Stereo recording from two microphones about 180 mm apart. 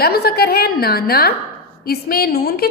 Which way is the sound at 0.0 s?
60° left (ahead or behind).